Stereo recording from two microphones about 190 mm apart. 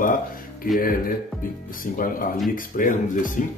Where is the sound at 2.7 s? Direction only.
45° left (ahead or behind).